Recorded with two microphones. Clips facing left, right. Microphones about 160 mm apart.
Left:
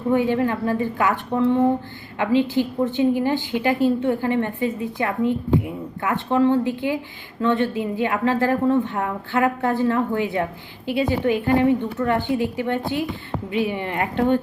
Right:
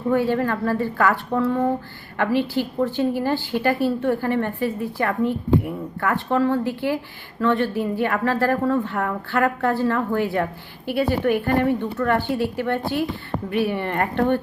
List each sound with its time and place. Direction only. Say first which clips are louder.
0.1 s a woman's voice: left 1 dB; 15° left (ahead or behind)